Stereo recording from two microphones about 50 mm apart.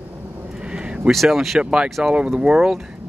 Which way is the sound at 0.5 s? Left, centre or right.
Centre.